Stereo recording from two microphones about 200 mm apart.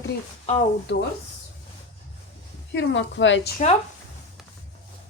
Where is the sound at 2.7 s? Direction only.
60° left (ahead or behind).